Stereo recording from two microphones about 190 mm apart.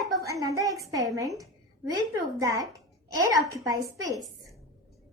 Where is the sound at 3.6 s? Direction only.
15° right (ahead or behind).